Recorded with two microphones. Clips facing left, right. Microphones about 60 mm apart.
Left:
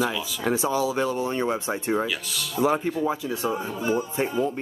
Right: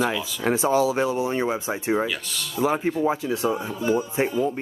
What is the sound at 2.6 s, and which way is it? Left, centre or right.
Speech, centre.